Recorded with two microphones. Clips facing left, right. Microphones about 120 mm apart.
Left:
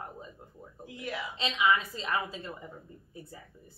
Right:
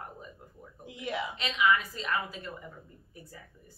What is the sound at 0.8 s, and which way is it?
Speech, 25° right (ahead or behind).